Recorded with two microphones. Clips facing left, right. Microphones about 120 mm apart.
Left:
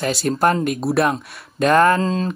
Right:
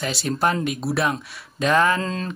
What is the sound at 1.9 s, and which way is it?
Mantra, 30° left (ahead or behind).